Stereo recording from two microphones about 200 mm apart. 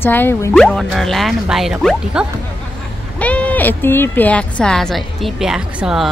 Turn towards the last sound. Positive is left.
turn(degrees=0)  # may be behind; listen again after turning